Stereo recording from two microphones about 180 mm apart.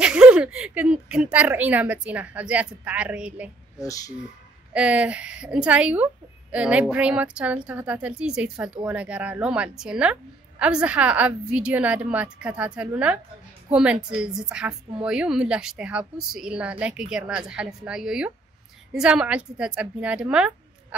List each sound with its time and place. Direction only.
0.0 s a woman's voice: 5° right (ahead or behind)